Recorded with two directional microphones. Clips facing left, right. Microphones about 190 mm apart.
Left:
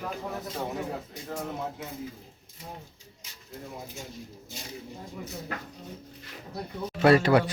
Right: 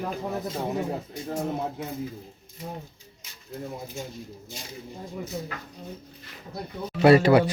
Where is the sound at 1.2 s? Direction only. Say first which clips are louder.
Right 5 dB; 30° right (ahead or behind).